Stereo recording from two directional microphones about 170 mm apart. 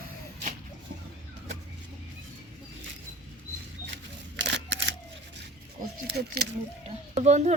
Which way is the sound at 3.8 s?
90° right.